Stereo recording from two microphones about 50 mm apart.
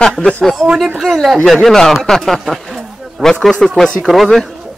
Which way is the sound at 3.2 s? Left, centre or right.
Centre.